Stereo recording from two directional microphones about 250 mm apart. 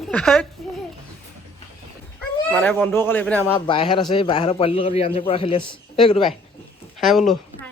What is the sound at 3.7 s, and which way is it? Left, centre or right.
A man's voice, centre.